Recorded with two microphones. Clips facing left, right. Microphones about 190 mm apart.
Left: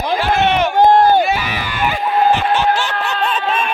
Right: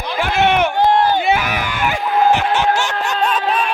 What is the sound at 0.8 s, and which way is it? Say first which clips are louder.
Run: left 7 dB; 45° left (ahead or behind).